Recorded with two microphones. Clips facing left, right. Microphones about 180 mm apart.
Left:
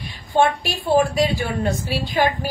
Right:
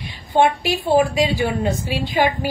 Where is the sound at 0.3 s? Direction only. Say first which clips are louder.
Right 2 dB; 15° right (ahead or behind).